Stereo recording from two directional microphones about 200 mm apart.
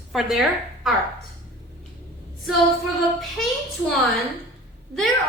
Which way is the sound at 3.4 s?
Centre (ahead or behind).